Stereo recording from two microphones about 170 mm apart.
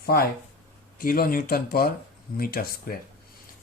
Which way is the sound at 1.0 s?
60° left (ahead or behind).